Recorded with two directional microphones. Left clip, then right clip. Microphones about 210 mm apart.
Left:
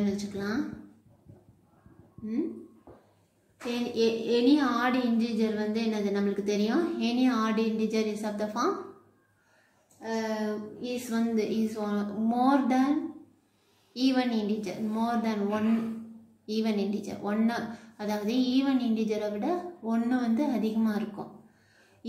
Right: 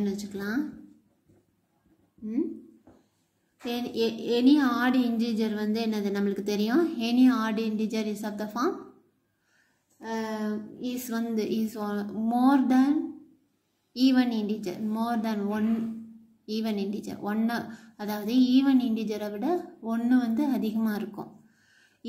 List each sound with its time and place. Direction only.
0.0 s speech: 45° right (ahead or behind)
3.6 s speech: 50° right (ahead or behind)
9.9 s speech: 50° right (ahead or behind)
13.9 s speech: 45° right (ahead or behind)